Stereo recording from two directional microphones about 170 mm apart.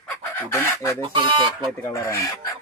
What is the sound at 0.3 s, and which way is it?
Chicken, 15° left (ahead or behind).